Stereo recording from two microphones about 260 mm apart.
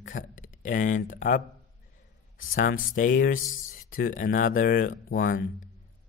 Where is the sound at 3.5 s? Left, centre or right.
Left.